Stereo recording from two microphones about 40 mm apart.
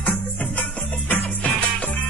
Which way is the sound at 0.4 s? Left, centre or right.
Left.